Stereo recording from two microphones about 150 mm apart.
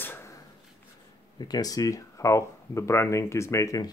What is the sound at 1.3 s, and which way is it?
Speech, 25° left (ahead or behind).